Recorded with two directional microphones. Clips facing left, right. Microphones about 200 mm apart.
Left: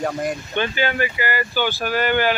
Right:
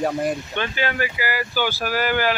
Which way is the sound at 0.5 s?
Centre (ahead or behind).